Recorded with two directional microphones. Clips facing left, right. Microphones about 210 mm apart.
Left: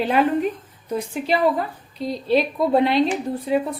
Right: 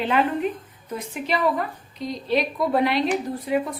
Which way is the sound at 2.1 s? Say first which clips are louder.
Left 4 dB; 30° left (ahead or behind).